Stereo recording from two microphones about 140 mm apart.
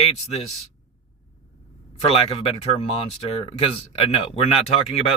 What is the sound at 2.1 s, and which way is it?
Speech, 45° left (ahead or behind).